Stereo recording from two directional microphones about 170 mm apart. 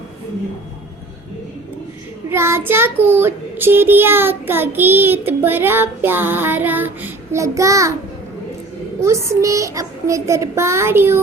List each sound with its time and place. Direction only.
2.3 s child singing: 15° right (ahead or behind)
9.0 s child singing: 15° right (ahead or behind)